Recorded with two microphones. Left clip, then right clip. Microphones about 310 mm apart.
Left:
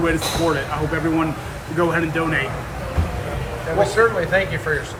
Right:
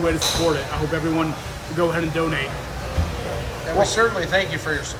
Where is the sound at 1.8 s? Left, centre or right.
Centre.